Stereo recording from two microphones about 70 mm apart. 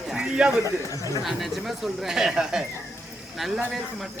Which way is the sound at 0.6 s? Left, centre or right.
Left.